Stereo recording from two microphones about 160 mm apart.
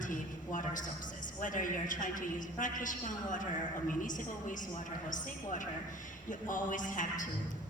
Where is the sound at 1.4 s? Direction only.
55° left (ahead or behind).